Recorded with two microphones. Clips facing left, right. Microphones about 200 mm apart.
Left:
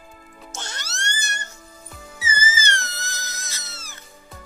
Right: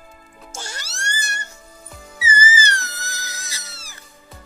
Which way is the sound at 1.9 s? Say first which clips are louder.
Right 4 dB; 10° right (ahead or behind).